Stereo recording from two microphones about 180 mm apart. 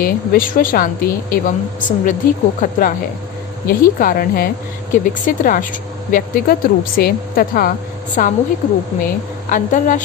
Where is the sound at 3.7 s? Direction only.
50° left (ahead or behind).